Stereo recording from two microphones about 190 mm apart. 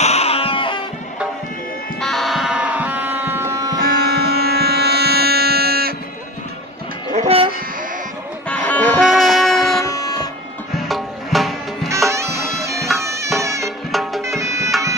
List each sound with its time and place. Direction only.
0.0 s music: 35° left (ahead or behind)
2.0 s music: centre (ahead or behind); by 3.7 s 15° right (ahead or behind)
4.1 s a sound: 55° right (ahead or behind)
7.2 s a sound: 30° right (ahead or behind)
8.5 s music: 5° left (ahead or behind)
9.8 s a sound: 20° left (ahead or behind)
10.9 s music: centre (ahead or behind)
12.1 s music: 15° right (ahead or behind)
12.7 s bagpipes: centre (ahead or behind)
13.0 s bagpipes: 15° right (ahead or behind)
13.6 s music: centre (ahead or behind)
14.2 s bagpipes: 15° right (ahead or behind)